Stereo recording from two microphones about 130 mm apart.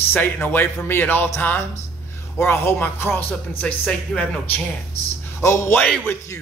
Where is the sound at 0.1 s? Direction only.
15° left (ahead or behind).